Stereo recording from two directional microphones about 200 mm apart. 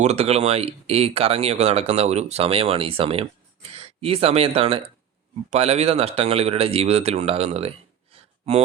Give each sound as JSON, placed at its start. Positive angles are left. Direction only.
{"t": 0.0, "sound": "speech", "side_deg": -30}